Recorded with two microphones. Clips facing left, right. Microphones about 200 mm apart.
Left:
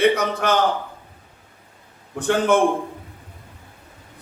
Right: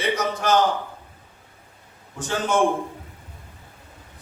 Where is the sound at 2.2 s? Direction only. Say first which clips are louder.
Left 6 dB; 60° left (ahead or behind).